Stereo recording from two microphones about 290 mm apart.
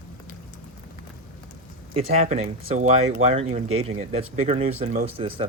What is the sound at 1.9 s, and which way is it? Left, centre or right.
Speech, right.